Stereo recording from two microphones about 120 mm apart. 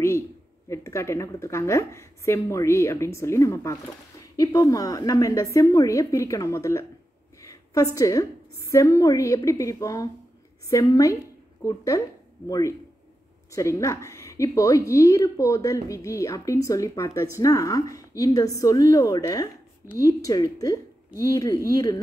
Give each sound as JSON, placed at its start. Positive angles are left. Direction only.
{"t": 0.7, "sound": "a woman's voice", "side_deg": 25}